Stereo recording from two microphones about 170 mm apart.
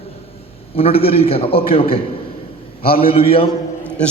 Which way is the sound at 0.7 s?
35° left (ahead or behind).